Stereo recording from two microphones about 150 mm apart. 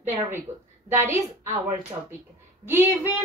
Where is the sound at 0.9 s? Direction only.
15° right (ahead or behind).